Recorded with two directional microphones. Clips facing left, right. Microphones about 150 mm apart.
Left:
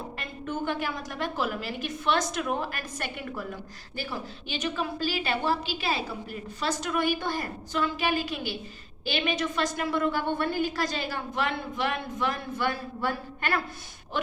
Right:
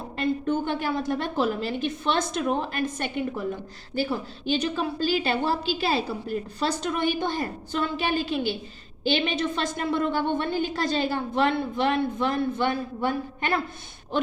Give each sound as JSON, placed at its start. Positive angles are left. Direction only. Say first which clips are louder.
{"t": 0.2, "sound": "a woman's voice", "louder": "right 10 dB", "side_deg": -30}
{"t": 4.4, "sound": "a woman's voice", "louder": "right 6 dB", "side_deg": -30}